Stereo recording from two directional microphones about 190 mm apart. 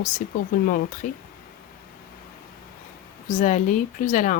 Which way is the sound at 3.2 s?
40° left (ahead or behind).